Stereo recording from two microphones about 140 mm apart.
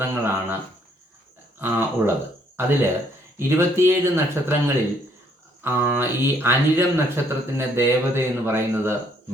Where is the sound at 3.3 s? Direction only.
20° right (ahead or behind).